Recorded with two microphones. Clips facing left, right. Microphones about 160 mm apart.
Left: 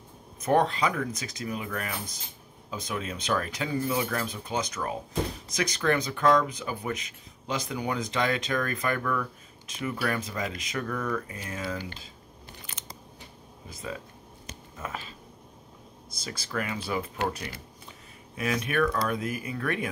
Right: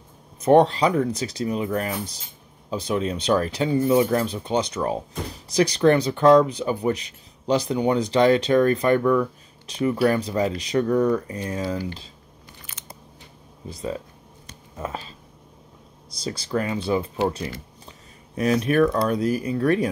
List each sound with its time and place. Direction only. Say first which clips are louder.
0.4 s speech: right 8 dB; 30° right (ahead or behind)
13.7 s speech: right 8 dB; 30° right (ahead or behind)
16.2 s speech: right 8 dB; 30° right (ahead or behind)